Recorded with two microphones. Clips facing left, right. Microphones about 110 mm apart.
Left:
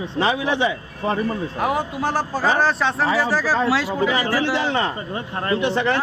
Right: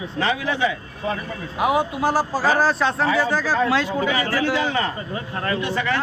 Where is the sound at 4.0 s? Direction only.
30° left (ahead or behind).